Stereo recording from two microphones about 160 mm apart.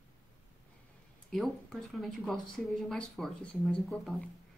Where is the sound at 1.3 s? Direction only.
Centre (ahead or behind).